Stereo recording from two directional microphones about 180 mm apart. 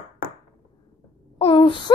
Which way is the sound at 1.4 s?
30° left (ahead or behind).